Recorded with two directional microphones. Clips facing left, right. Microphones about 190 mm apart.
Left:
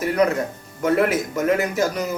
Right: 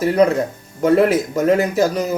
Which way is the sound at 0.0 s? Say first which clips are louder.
Right 5 dB; 30° right (ahead or behind).